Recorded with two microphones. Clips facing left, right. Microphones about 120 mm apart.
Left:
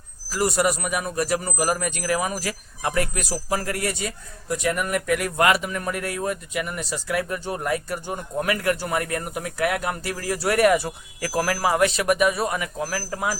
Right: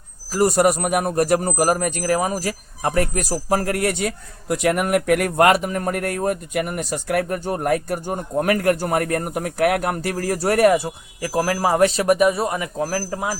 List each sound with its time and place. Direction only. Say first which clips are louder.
0.3 s a man's voice: right 5 dB; 40° right (ahead or behind)
10.8 s speech: right 3 dB; 20° right (ahead or behind)